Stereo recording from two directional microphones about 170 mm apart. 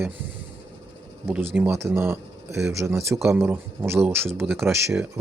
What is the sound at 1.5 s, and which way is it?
Speech, 10° right (ahead or behind).